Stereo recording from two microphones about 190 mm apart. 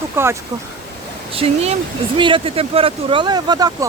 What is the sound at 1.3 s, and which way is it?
Speech, 30° right (ahead or behind).